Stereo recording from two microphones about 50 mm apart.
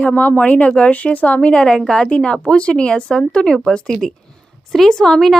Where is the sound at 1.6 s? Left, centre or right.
Centre.